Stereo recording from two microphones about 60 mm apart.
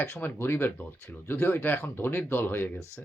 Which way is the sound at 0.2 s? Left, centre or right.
Left.